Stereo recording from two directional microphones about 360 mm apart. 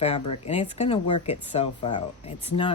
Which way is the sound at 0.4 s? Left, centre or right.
Centre.